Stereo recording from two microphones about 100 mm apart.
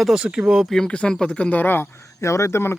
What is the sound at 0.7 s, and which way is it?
Speech, 10° left (ahead or behind).